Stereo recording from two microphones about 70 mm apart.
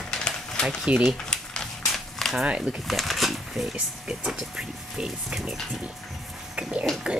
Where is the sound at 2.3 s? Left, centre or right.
Centre.